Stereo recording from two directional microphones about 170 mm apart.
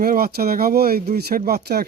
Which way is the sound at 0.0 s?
60° right (ahead or behind).